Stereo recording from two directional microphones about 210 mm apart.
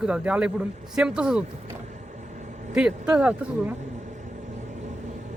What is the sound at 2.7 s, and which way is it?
A man's voice, 5° right (ahead or behind).